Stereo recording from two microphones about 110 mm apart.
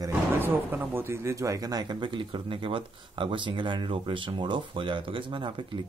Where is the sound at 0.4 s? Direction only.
20° right (ahead or behind).